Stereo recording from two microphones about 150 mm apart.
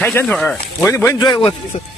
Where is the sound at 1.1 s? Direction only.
30° left (ahead or behind).